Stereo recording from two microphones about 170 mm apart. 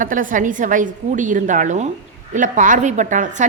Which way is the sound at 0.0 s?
50° right (ahead or behind).